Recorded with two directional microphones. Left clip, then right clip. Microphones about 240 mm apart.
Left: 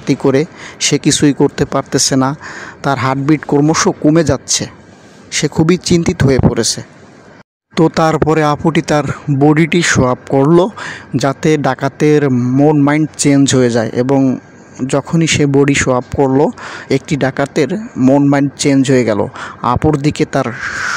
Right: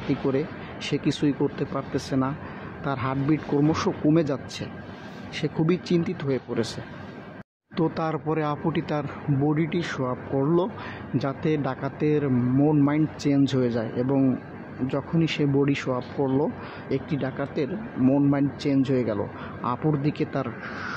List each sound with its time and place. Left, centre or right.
0.1 s speech: left